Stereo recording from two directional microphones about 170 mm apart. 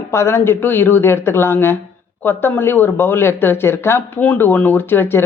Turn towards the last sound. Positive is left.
turn(degrees=15)  # may be behind; listen again after turning